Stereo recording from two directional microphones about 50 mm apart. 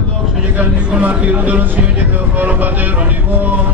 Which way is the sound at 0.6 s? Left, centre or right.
Right.